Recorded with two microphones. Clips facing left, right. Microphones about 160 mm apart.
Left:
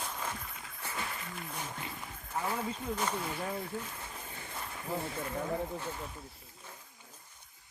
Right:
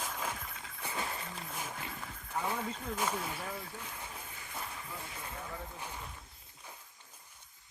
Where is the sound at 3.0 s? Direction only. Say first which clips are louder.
Right 1 dB; 5° right (ahead or behind).